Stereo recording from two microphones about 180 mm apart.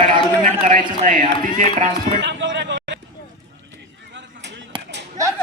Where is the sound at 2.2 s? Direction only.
85° right.